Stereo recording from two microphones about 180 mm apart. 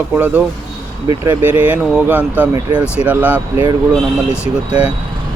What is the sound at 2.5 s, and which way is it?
Speech, 25° right (ahead or behind).